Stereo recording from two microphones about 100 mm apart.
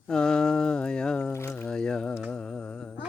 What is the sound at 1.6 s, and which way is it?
Mantra, 5° left (ahead or behind).